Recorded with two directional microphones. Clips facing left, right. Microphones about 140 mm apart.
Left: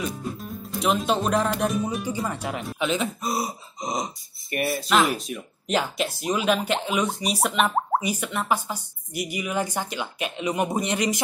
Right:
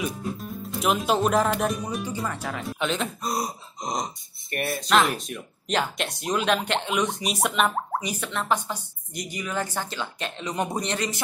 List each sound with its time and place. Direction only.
0.0 s speech: centre (ahead or behind)
2.2 s speech: 20° left (ahead or behind)
2.8 s a woman's voice: centre (ahead or behind)